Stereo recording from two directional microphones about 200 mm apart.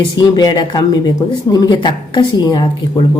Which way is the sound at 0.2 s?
20° left (ahead or behind).